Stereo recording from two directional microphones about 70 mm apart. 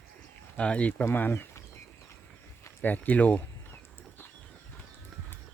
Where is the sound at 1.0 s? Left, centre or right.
Left.